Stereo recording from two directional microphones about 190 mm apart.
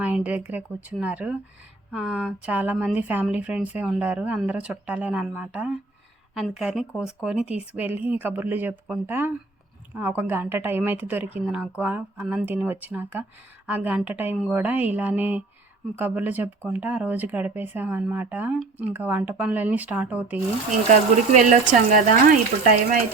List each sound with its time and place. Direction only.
0.0 s speech: 10° right (ahead or behind)
20.9 s speech: 40° right (ahead or behind)